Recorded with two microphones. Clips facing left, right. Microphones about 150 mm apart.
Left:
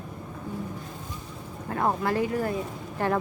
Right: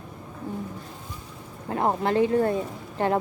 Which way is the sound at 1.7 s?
25° right (ahead or behind).